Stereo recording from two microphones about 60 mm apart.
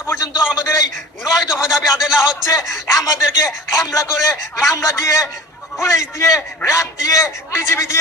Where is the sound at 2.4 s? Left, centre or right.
Left.